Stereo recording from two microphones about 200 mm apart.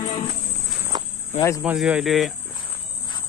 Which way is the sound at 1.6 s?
5° right (ahead or behind).